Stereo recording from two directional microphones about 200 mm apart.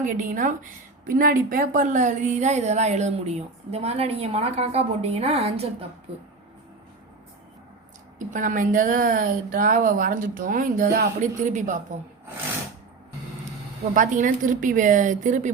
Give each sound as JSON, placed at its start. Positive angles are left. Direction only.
{"t": 0.0, "sound": "a woman's voice", "side_deg": -40}
{"t": 8.2, "sound": "a woman's voice", "side_deg": -40}
{"t": 13.9, "sound": "a woman's voice", "side_deg": -40}